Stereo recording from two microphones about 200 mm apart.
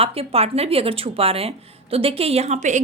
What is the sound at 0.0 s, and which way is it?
A woman's voice, 30° right (ahead or behind).